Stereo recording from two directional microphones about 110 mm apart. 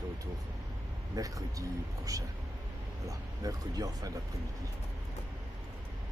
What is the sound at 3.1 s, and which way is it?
Speech, 35° right (ahead or behind).